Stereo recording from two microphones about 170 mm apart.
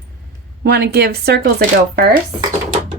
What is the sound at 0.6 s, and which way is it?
Speech, 70° right (ahead or behind).